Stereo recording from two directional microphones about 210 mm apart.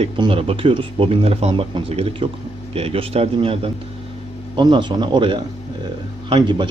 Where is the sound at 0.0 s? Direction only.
25° right (ahead or behind).